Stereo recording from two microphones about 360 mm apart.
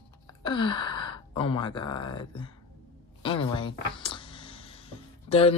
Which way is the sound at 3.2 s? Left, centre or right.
Centre.